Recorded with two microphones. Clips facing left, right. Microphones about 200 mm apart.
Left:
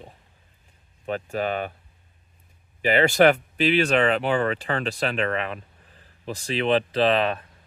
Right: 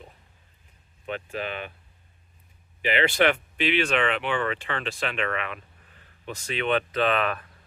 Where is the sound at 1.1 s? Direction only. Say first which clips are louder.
Left 6 dB; 40° left (ahead or behind).